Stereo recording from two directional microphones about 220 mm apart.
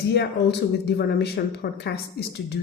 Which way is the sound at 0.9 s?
50° left (ahead or behind).